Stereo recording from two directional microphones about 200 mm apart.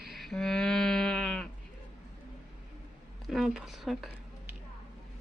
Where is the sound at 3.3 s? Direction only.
Centre (ahead or behind).